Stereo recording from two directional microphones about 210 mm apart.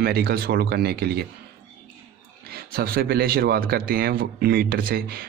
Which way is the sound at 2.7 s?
45° right (ahead or behind).